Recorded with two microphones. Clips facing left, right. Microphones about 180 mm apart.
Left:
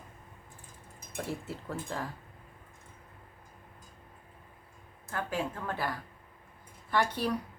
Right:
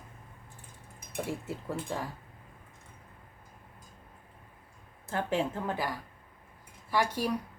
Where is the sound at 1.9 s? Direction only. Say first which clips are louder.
Right 1 dB; 10° right (ahead or behind).